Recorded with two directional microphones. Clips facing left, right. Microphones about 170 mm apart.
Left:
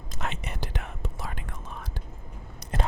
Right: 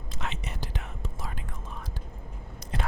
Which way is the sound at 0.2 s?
55° left (ahead or behind).